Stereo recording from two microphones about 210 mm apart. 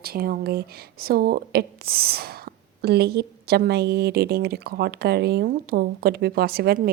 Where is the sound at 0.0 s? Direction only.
45° right (ahead or behind).